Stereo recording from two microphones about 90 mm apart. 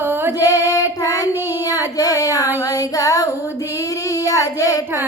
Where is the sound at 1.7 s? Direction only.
40° left (ahead or behind).